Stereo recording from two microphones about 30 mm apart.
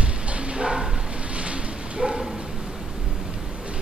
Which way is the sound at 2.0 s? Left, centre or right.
Centre.